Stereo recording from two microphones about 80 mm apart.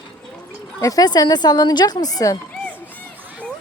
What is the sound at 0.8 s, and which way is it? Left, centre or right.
Speech, left.